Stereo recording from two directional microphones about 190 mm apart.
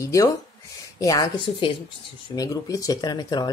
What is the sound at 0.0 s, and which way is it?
A woman's voice, 15° left (ahead or behind).